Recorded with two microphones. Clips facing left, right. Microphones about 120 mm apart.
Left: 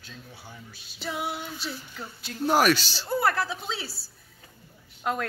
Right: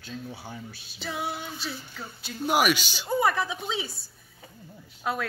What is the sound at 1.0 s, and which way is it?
Female singing, 5° left (ahead or behind).